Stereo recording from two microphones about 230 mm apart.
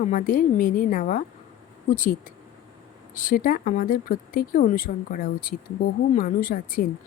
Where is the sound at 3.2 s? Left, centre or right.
Left.